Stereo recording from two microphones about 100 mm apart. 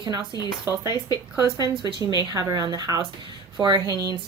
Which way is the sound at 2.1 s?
40° right (ahead or behind).